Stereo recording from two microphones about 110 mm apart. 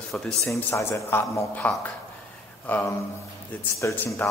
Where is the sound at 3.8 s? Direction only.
25° left (ahead or behind).